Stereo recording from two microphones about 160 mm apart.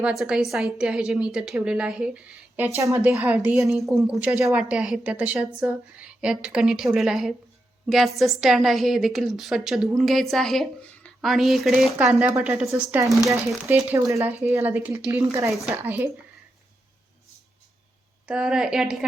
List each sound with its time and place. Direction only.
0.0 s a woman's voice: 5° right (ahead or behind)
12.1 s speech: 10° right (ahead or behind)
18.3 s a woman's voice: 5° right (ahead or behind)